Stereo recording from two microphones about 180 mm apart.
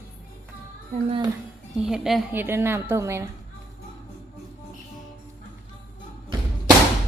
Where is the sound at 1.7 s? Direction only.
5° right (ahead or behind).